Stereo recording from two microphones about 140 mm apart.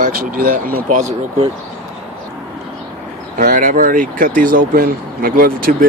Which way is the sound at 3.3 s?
75° right (ahead or behind).